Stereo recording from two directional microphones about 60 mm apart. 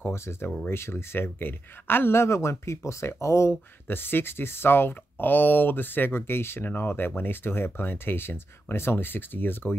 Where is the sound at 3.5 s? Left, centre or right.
Left.